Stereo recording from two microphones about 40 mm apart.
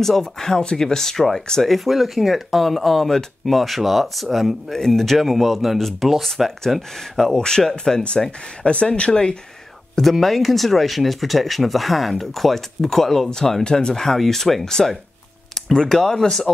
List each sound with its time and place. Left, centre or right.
0.0 s speech: centre
1.9 s speech: centre
4.7 s speech: centre
8.0 s speech: left
10.1 s speech: centre